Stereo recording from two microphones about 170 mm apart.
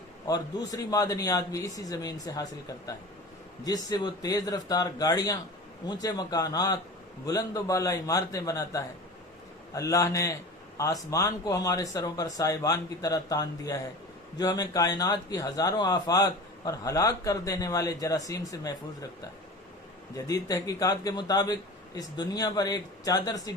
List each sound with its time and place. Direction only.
0.3 s speech: 20° left (ahead or behind)
20.1 s speech: 20° left (ahead or behind)